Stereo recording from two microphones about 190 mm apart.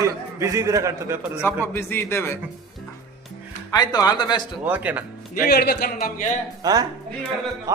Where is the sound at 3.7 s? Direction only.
20° left (ahead or behind).